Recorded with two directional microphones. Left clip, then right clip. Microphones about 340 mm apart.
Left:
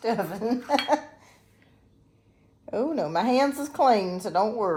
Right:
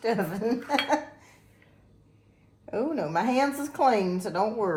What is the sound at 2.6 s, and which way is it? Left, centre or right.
A woman's voice, left.